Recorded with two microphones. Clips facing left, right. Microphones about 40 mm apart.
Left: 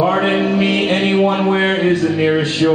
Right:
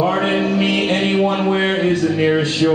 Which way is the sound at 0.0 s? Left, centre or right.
Centre.